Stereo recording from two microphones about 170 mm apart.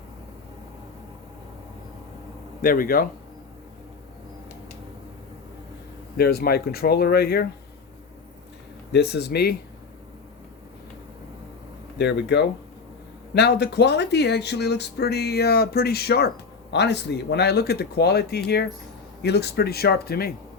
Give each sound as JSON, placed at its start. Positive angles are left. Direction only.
{"t": 2.6, "sound": "speech", "side_deg": 55}
{"t": 6.1, "sound": "speech", "side_deg": 65}
{"t": 8.9, "sound": "speech", "side_deg": 75}
{"t": 11.9, "sound": "speech", "side_deg": 80}
{"t": 16.7, "sound": "speech", "side_deg": 85}